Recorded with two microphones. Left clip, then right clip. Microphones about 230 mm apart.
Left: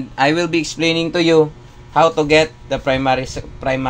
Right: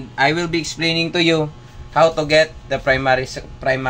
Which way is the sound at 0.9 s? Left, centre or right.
Centre.